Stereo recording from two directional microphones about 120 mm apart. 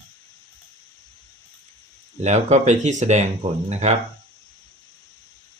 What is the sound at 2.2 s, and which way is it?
Speech, 75° right (ahead or behind).